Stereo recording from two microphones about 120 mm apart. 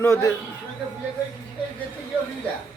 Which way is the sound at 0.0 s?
25° left (ahead or behind).